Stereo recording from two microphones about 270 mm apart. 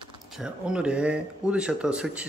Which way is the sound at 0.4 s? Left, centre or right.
Centre.